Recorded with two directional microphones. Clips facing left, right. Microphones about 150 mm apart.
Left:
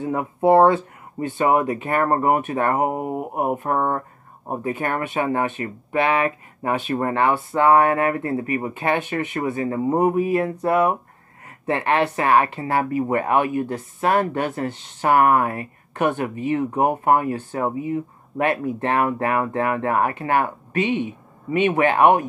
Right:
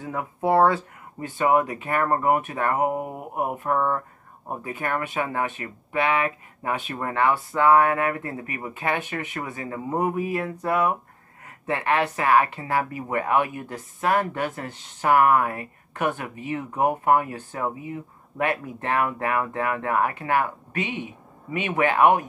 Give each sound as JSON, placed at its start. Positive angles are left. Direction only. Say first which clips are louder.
{"t": 0.0, "sound": "speech", "louder": "left 7 dB", "side_deg": 30}